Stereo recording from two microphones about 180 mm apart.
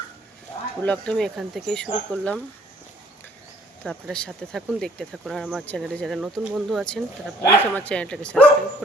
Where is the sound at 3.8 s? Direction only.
5° left (ahead or behind).